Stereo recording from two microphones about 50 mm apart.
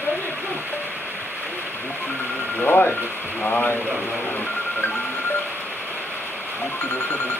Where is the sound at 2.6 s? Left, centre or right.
Left.